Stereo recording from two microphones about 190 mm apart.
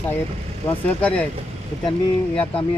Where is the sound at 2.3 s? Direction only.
5° left (ahead or behind).